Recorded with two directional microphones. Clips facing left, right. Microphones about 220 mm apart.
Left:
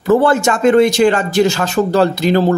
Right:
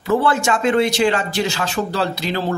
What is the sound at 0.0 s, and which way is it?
Speech, 45° left (ahead or behind).